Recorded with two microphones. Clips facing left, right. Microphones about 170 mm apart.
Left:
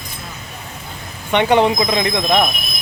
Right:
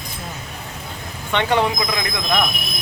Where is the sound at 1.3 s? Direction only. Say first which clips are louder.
Left 5 dB; 20° left (ahead or behind).